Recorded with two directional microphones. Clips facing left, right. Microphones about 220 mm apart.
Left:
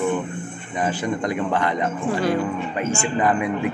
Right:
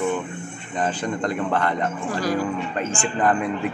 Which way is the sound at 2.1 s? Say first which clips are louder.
Left 3 dB; 25° left (ahead or behind).